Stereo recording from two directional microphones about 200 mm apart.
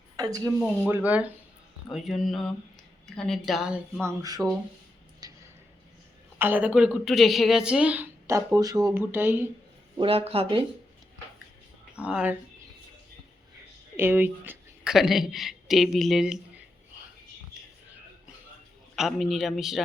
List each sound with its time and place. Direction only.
0.2 s a woman's voice: 15° right (ahead or behind); by 4.0 s centre (ahead or behind)
4.0 s a woman's voice: 15° right (ahead or behind)
5.2 s tick-tock: 20° right (ahead or behind)
6.4 s a woman's voice: 10° right (ahead or behind)
10.0 s speech: 30° right (ahead or behind)
12.0 s a woman's voice: 5° right (ahead or behind)
13.9 s a woman's voice: 10° right (ahead or behind)
18.9 s speech: centre (ahead or behind)